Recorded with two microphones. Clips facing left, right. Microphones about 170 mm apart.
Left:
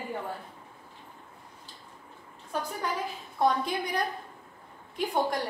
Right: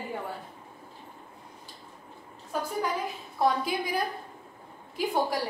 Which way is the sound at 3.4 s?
5° right (ahead or behind).